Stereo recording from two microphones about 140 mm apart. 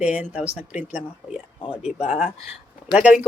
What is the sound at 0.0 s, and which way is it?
Speech, 10° right (ahead or behind).